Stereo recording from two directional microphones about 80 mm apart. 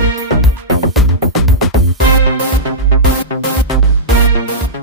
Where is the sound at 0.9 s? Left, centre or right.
Centre.